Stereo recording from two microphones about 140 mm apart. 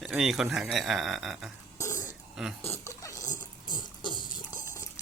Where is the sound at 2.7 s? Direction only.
20° left (ahead or behind).